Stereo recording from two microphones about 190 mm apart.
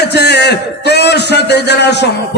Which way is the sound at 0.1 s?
60° left (ahead or behind).